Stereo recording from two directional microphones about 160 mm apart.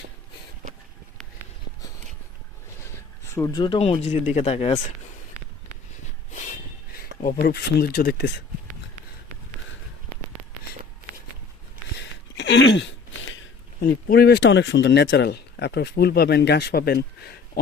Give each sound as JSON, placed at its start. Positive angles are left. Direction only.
{"t": 3.3, "sound": "speech", "side_deg": 25}
{"t": 7.2, "sound": "speech", "side_deg": 50}
{"t": 7.4, "sound": "speech", "side_deg": 80}
{"t": 12.4, "sound": "a sound", "side_deg": 90}
{"t": 13.7, "sound": "speech", "side_deg": 75}